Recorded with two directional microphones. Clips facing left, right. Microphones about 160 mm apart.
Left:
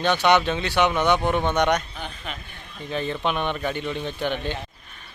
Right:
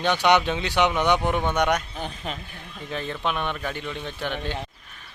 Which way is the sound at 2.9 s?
Centre (ahead or behind).